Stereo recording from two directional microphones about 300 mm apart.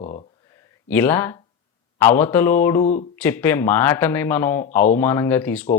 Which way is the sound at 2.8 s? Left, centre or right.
Left.